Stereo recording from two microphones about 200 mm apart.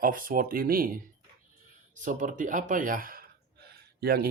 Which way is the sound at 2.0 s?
40° right (ahead or behind).